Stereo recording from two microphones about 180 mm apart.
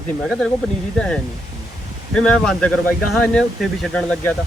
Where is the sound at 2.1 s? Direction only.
5° left (ahead or behind).